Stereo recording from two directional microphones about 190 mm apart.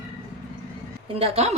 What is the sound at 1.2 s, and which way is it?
Speech, 35° right (ahead or behind).